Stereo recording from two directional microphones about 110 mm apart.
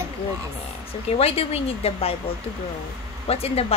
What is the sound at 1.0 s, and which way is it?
Speech, 65° left (ahead or behind).